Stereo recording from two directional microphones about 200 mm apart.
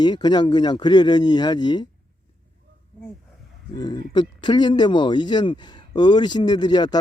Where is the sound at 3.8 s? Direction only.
20° left (ahead or behind).